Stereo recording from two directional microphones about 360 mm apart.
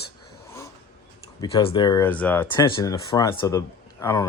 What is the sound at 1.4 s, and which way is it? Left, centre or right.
Speech, centre.